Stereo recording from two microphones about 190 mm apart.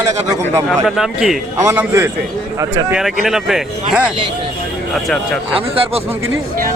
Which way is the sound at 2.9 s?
Centre (ahead or behind).